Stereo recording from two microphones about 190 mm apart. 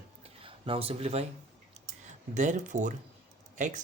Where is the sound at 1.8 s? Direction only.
35° right (ahead or behind).